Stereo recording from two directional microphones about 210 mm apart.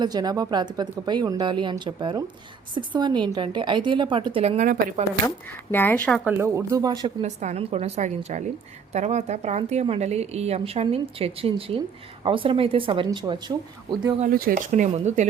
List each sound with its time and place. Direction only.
0.0 s speech: 20° right (ahead or behind); by 5.0 s 40° right (ahead or behind)
5.7 s speech: 10° left (ahead or behind)
6.2 s speech: 10° right (ahead or behind)
7.2 s speech: 35° right (ahead or behind)
14.2 s speech: 40° right (ahead or behind)